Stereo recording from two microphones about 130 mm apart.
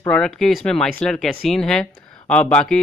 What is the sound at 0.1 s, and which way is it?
Speech, 5° left (ahead or behind).